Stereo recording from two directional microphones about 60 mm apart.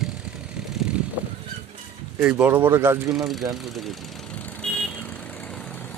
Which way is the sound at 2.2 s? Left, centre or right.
Right.